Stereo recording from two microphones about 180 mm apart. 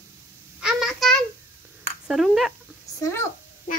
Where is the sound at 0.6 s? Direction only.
5° right (ahead or behind).